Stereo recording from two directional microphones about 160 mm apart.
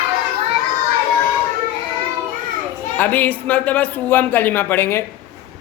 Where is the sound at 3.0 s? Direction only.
10° left (ahead or behind).